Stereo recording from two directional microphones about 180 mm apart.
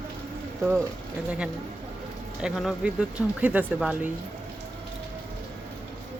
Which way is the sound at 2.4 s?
5° right (ahead or behind).